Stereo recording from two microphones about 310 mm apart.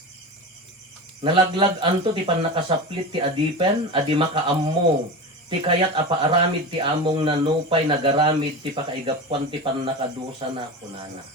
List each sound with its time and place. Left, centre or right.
1.2 s speech: centre